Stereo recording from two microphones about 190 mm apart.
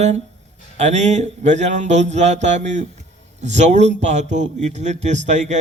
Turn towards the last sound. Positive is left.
turn(degrees=-40)  # may be behind; listen again after turning